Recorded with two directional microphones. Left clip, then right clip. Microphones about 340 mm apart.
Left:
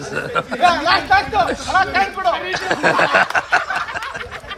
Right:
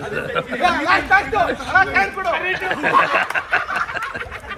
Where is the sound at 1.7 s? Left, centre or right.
Left.